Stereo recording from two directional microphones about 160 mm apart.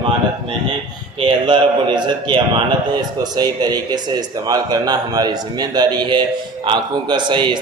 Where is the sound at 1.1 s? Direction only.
30° right (ahead or behind).